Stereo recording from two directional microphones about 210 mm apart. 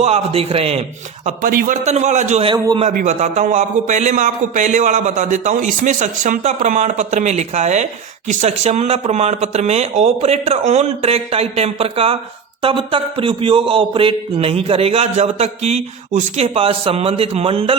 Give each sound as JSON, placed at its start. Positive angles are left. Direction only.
{"t": 0.0, "sound": "mantra", "side_deg": -30}
{"t": 1.4, "sound": "speech", "side_deg": -40}
{"t": 2.9, "sound": "speech", "side_deg": -35}
{"t": 12.6, "sound": "mantra", "side_deg": -25}